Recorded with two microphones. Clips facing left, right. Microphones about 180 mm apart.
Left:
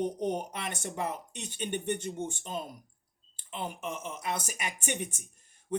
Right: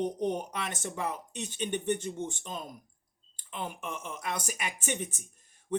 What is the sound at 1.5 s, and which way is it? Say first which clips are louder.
Speech: right 1 dB; 55° left (ahead or behind).